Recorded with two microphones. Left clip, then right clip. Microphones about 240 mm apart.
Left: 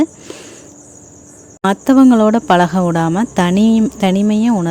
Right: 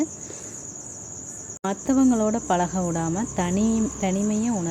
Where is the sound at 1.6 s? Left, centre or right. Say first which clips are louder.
Left 11 dB; left.